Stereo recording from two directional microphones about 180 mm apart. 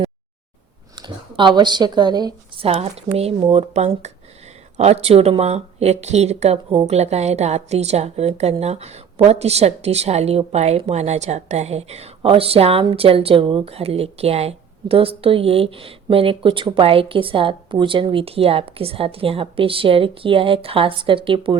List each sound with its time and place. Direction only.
0.9 s a woman's voice: 25° right (ahead or behind)